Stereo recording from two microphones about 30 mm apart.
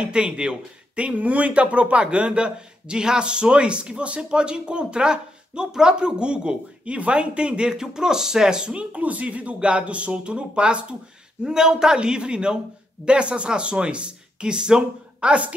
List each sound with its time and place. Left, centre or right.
0.0 s a man's voice: right
1.1 s a man's voice: right
8.7 s speech: right
11.4 s a man's voice: right
15.1 s a woman's voice: right